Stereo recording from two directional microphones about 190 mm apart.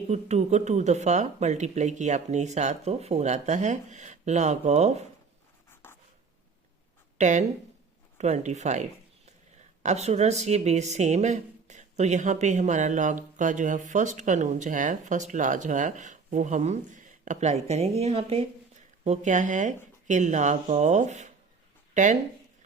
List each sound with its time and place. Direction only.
0.1 s speech: 35° right (ahead or behind)
7.2 s speech: 40° right (ahead or behind)
9.8 s speech: 35° right (ahead or behind)